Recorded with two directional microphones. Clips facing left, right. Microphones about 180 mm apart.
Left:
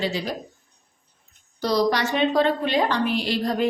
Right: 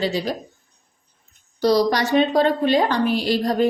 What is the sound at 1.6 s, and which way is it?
A woman's voice, 40° right (ahead or behind).